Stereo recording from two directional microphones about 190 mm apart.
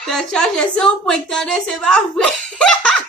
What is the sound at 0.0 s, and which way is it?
A woman's voice, centre (ahead or behind).